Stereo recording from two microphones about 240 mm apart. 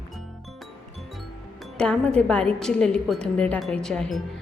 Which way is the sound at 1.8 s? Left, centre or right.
Centre.